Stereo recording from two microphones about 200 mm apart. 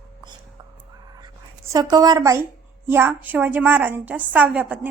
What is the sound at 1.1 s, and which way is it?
Writing, 15° right (ahead or behind).